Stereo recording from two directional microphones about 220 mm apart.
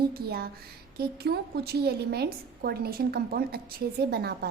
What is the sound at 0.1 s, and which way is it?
A woman's voice, 45° right (ahead or behind).